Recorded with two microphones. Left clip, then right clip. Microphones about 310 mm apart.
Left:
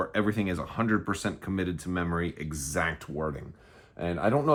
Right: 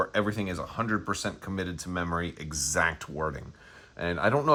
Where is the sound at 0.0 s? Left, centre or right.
Centre.